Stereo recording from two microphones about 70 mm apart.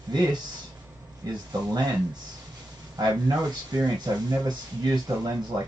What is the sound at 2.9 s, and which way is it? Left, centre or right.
Speech, right.